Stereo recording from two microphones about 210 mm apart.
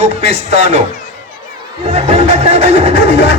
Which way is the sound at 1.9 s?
30° right (ahead or behind).